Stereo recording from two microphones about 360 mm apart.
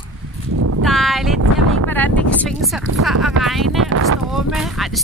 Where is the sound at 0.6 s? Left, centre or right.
Right.